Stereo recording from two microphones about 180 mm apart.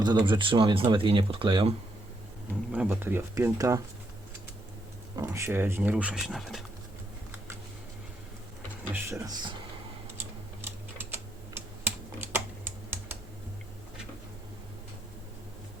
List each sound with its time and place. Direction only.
0.0 s speech: 25° right (ahead or behind)
2.7 s speech: 10° right (ahead or behind)
5.1 s speech: 15° right (ahead or behind); by 6.7 s centre (ahead or behind)
9.0 s speech: 15° right (ahead or behind)
11.1 s typing: 10° right (ahead or behind)